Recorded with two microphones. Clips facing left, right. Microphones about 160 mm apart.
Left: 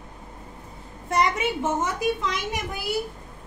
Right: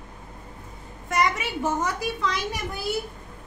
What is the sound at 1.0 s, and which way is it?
A child's voice, 25° left (ahead or behind).